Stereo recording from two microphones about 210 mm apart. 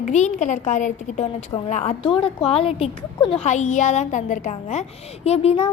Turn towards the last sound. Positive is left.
turn(degrees=30)  # may be behind; listen again after turning